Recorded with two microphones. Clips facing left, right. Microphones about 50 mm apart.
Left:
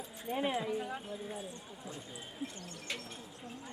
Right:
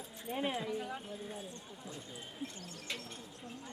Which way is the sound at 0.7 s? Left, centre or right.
Centre.